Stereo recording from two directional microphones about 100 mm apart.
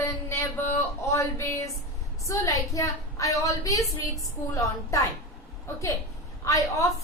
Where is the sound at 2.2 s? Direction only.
30° left (ahead or behind).